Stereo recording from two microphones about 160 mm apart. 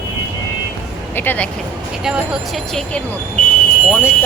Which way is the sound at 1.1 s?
10° left (ahead or behind).